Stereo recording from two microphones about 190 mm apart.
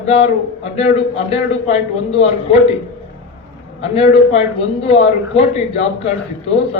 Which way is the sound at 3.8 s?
30° left (ahead or behind).